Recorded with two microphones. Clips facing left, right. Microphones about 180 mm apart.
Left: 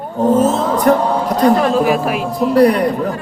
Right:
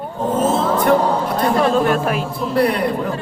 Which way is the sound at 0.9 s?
40° left (ahead or behind).